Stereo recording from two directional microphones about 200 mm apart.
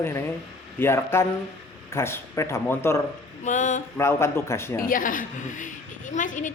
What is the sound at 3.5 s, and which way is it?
Speech, 40° left (ahead or behind).